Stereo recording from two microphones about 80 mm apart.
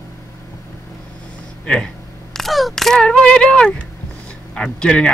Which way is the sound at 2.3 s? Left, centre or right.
Centre.